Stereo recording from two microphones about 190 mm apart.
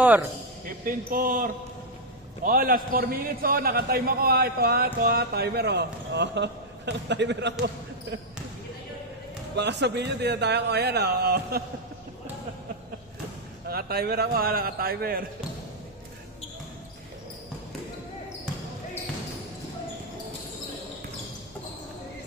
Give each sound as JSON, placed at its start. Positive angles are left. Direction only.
{"t": 0.7, "sound": "a man's voice", "side_deg": -50}
{"t": 9.6, "sound": "speech", "side_deg": -65}
{"t": 13.7, "sound": "a man's voice", "side_deg": -55}